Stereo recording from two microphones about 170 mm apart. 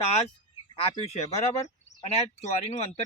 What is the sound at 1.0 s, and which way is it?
Speech, 40° left (ahead or behind).